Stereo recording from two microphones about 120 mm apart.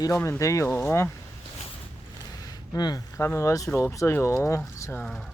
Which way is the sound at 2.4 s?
35° left (ahead or behind).